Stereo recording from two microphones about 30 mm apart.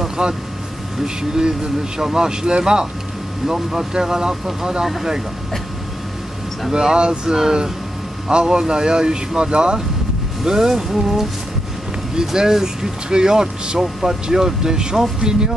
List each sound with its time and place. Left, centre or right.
0.2 s speech: right
6.7 s speech: right
10.4 s speech: centre
12.4 s speech: centre